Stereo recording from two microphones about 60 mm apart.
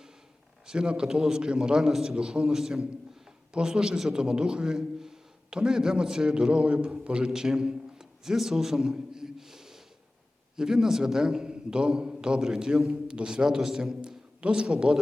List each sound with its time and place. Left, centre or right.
0.7 s a man's voice: centre
7.3 s a sound: centre
10.6 s a man's voice: centre